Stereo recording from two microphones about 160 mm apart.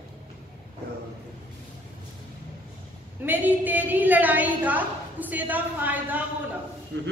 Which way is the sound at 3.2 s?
10° right (ahead or behind).